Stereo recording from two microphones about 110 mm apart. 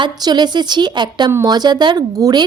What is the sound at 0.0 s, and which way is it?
A woman's voice, 40° right (ahead or behind).